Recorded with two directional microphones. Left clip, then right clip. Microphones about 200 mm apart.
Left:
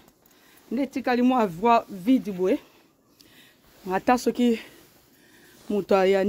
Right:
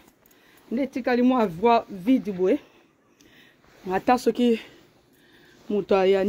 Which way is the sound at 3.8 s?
10° left (ahead or behind).